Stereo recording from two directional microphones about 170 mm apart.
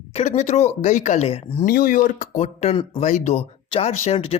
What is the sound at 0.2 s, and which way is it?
Speech, 45° left (ahead or behind).